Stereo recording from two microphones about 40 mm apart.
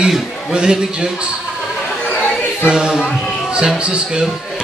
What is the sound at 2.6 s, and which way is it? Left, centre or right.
Music, centre.